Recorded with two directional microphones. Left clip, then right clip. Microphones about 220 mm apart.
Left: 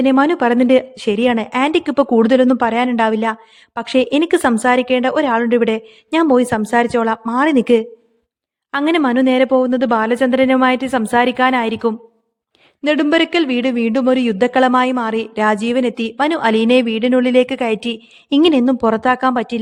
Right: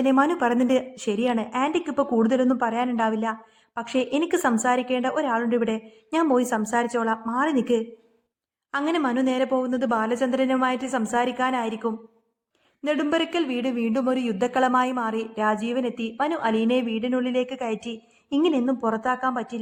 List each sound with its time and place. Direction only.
0.0 s a man's voice: 45° left (ahead or behind)